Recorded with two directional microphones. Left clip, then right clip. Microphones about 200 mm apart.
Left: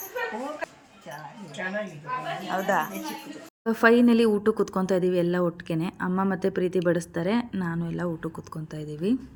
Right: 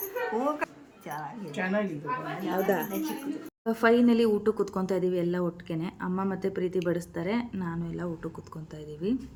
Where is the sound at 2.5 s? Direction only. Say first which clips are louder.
Left 3 dB; 5° right (ahead or behind).